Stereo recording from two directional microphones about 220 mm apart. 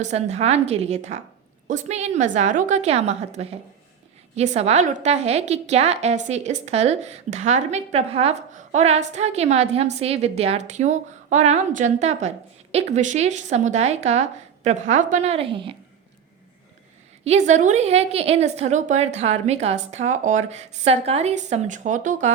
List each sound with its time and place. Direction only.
0.0 s a woman's voice: 30° right (ahead or behind)
17.2 s a woman's voice: 30° right (ahead or behind)